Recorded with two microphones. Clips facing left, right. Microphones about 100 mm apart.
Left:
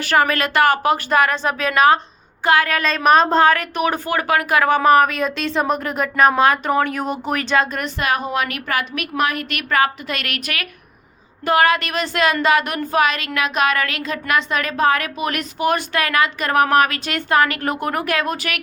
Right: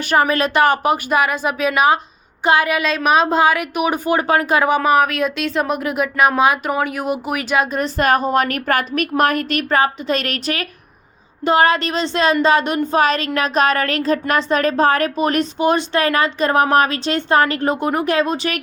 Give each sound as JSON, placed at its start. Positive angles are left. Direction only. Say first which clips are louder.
{"t": 0.0, "sound": "speech", "louder": "right 1 dB", "side_deg": -20}
{"t": 4.7, "sound": "speech", "louder": "left 4 dB", "side_deg": -5}
{"t": 7.9, "sound": "a woman's voice", "louder": "right 5 dB", "side_deg": -40}